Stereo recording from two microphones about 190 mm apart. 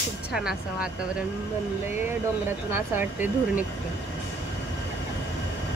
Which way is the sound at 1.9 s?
10° right (ahead or behind).